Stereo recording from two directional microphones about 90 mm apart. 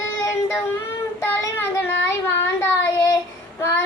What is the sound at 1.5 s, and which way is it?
Child singing, 25° left (ahead or behind).